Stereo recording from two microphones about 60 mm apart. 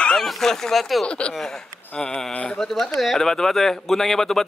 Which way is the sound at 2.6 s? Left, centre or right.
Centre.